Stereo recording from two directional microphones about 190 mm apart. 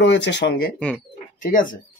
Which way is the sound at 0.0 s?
65° left (ahead or behind).